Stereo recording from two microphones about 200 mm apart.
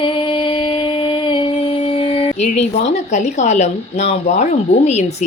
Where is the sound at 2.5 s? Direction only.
35° left (ahead or behind).